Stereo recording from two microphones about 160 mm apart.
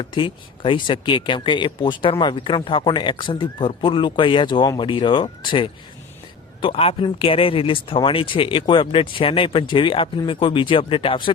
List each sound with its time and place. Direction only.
0.0 s speech: 30° left (ahead or behind)